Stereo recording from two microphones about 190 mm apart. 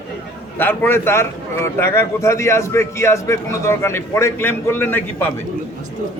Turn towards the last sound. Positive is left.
turn(degrees=10)  # may be behind; listen again after turning